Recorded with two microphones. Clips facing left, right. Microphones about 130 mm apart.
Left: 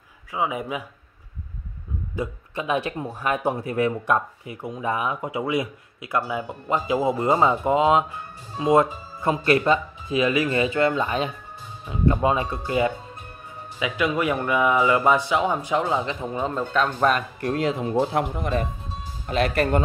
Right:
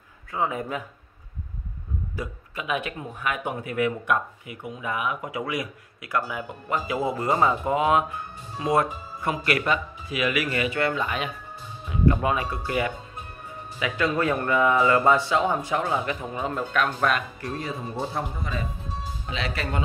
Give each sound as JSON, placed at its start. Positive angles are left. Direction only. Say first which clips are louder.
{"t": 0.3, "sound": "a man's voice", "louder": "left 1 dB", "side_deg": 10}
{"t": 2.1, "sound": "a man's voice", "louder": "left 8 dB", "side_deg": 30}
{"t": 17.4, "sound": "speech", "louder": "left 8 dB", "side_deg": 75}
{"t": 19.2, "sound": "speech", "louder": "left 10 dB", "side_deg": 50}